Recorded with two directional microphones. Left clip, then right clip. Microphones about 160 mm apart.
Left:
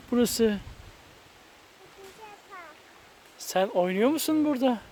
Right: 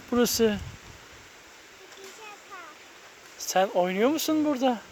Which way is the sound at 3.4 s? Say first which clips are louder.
Right 1 dB; 25° left (ahead or behind).